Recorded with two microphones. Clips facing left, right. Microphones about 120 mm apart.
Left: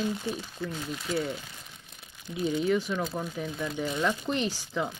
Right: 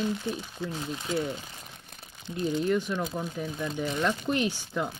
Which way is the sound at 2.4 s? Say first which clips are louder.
Even; 5° left (ahead or behind).